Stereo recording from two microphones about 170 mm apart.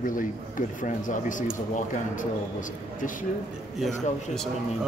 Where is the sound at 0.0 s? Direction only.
50° left (ahead or behind).